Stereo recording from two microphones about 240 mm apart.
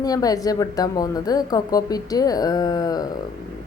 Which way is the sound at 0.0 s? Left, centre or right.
Centre.